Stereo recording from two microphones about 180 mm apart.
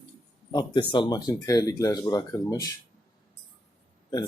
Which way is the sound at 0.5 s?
25° left (ahead or behind).